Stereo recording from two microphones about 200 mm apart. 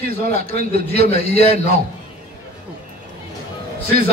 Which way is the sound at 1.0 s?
30° left (ahead or behind).